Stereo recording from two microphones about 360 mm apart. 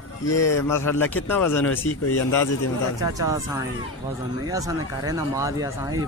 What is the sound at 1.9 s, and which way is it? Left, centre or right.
Speech, left.